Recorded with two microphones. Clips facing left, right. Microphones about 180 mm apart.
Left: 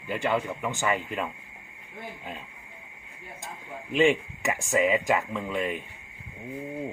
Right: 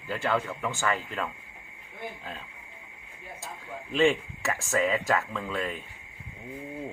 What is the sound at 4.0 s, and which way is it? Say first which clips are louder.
Speech: left 1 dB; 15° left (ahead or behind).